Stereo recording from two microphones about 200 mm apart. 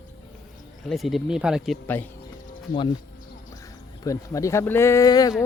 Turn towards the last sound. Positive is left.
turn(degrees=15)  # may be behind; listen again after turning